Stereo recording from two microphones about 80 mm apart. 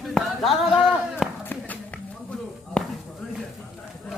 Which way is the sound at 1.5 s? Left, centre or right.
Centre.